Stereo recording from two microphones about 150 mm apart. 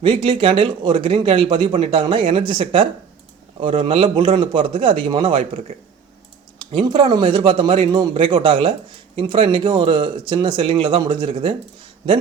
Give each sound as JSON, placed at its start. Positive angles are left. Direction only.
{"t": 0.0, "sound": "a man's voice", "side_deg": -35}